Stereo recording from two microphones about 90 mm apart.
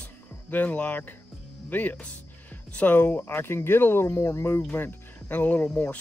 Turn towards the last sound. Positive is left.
turn(degrees=15)  # may be behind; listen again after turning